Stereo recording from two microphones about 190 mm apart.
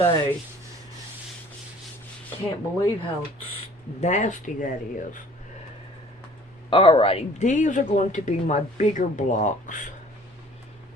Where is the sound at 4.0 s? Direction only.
40° left (ahead or behind).